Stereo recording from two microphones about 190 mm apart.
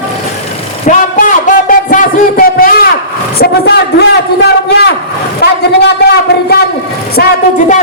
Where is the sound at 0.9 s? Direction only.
40° left (ahead or behind); by 5.6 s 60° left (ahead or behind).